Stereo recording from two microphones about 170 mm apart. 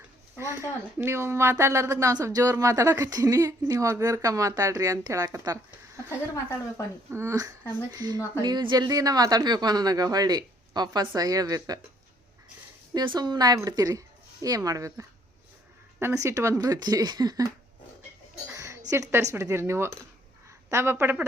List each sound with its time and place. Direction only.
0.3 s a woman's voice: 15° right (ahead or behind)
6.1 s a woman's voice: 15° left (ahead or behind)
7.1 s a woman's voice: 15° right (ahead or behind)
7.6 s speech: 10° left (ahead or behind)
7.9 s a woman's voice: 25° right (ahead or behind)
12.9 s a woman's voice: 25° right (ahead or behind)
18.5 s a sound: 20° right (ahead or behind)
18.9 s a woman's voice: 20° right (ahead or behind)